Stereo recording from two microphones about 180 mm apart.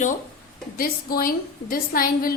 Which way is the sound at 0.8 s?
55° left (ahead or behind).